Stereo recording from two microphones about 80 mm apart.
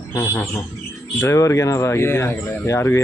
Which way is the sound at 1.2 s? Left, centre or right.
Left.